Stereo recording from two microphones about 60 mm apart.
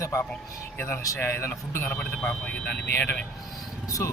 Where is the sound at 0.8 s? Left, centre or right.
Left.